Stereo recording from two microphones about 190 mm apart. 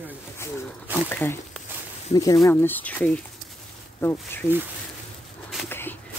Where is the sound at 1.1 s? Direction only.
10° left (ahead or behind).